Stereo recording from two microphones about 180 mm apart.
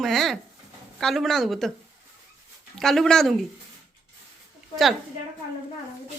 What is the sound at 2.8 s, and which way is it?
Speech, centre (ahead or behind).